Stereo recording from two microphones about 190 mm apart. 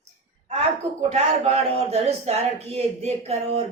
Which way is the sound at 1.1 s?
35° right (ahead or behind).